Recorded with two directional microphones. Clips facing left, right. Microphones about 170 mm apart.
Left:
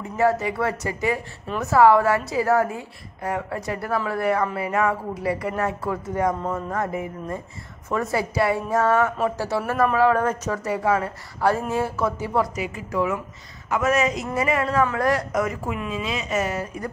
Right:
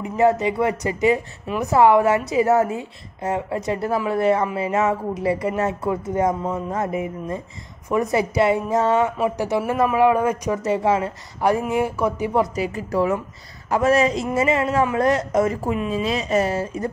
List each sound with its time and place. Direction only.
0.0 s a woman's voice: 20° right (ahead or behind)
12.5 s a woman's voice: 35° right (ahead or behind)